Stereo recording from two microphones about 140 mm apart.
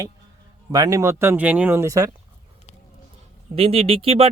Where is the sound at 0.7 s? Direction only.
25° right (ahead or behind).